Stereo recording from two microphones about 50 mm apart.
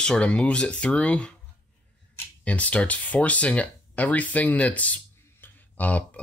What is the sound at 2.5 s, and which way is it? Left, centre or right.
Speech, left.